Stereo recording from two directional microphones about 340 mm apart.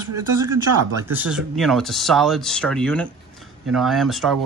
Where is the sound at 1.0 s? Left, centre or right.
Centre.